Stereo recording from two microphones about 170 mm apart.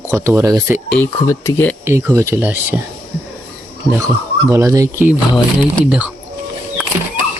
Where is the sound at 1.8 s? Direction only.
15° right (ahead or behind).